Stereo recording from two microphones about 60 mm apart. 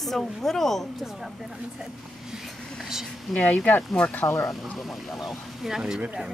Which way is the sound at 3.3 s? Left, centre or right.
Left.